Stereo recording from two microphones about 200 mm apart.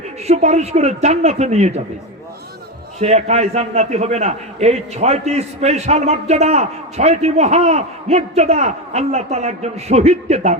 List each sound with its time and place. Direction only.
0.3 s a man's voice: 35° right (ahead or behind)
3.0 s a man's voice: 35° right (ahead or behind)